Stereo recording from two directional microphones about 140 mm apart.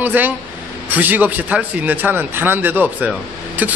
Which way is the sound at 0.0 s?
15° right (ahead or behind).